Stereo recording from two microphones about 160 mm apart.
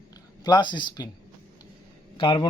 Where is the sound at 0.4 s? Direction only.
30° left (ahead or behind).